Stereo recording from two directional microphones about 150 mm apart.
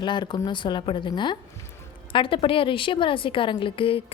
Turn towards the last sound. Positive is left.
turn(degrees=35)  # may be behind; listen again after turning